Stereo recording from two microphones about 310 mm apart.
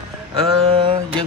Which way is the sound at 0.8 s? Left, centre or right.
Centre.